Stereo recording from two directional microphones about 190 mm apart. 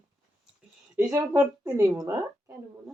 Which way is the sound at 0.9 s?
15° right (ahead or behind).